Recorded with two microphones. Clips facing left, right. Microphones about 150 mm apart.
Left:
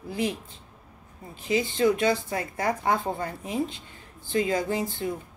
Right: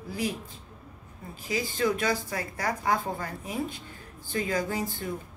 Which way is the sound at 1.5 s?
25° left (ahead or behind).